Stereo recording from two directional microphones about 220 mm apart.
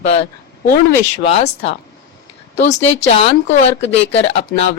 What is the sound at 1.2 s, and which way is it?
Speech, 25° left (ahead or behind).